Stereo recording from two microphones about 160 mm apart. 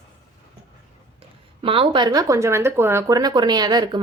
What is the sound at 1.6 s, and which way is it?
Speech, 35° right (ahead or behind).